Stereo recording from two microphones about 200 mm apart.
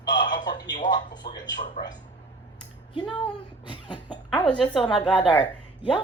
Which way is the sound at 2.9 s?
20° left (ahead or behind).